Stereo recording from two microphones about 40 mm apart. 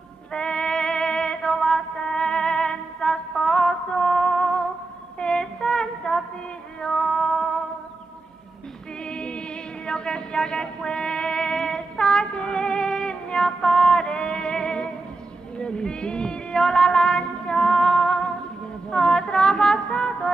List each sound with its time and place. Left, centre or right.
0.3 s music: left
5.2 s a sound: left
6.8 s female singing: left
7.1 s music: centre
9.0 s music: left